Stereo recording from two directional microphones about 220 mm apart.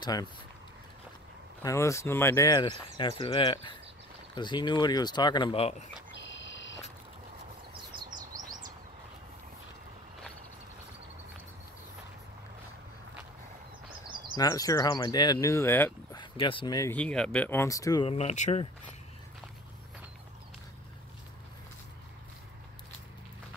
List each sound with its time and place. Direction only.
0.0 s speech: 20° left (ahead or behind)
1.6 s speech: 15° left (ahead or behind)
6.1 s a sound: 55° left (ahead or behind)
7.9 s bird: 20° right (ahead or behind)
8.2 s bird: 40° right (ahead or behind)
14.3 s speech: 15° left (ahead or behind)
18.1 s speech: 30° left (ahead or behind)